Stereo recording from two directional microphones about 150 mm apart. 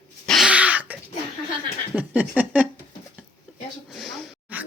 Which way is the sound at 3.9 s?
Centre (ahead or behind).